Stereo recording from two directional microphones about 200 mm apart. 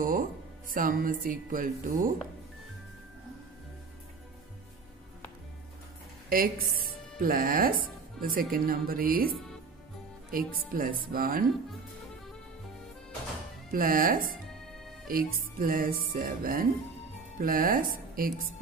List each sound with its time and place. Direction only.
0.0 s speech: 45° right (ahead or behind)
6.2 s music: 45° right (ahead or behind)
7.2 s speech: 45° right (ahead or behind)
10.3 s speech: 45° right (ahead or behind)
13.7 s speech: 45° right (ahead or behind)